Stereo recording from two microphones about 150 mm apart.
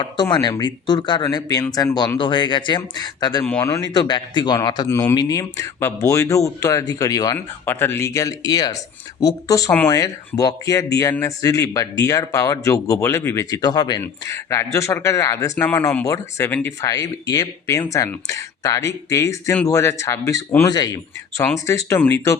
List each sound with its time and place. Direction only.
0.0 s speech: 30° left (ahead or behind)
3.4 s a man's voice: 15° left (ahead or behind)
3.8 s speech: 30° left (ahead or behind)
7.3 s a man's voice: 15° left (ahead or behind)
20.7 s a man's voice: 25° left (ahead or behind)